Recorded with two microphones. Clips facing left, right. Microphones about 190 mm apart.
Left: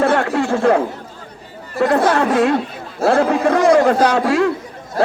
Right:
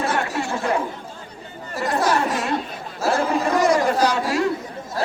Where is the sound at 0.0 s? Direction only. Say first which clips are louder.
Left 8 dB; 60° left (ahead or behind).